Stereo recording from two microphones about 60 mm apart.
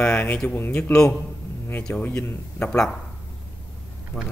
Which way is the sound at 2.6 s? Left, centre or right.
Centre.